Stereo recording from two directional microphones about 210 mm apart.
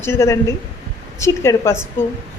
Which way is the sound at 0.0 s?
10° left (ahead or behind).